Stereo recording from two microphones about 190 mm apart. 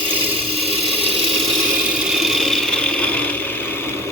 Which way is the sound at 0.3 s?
30° right (ahead or behind).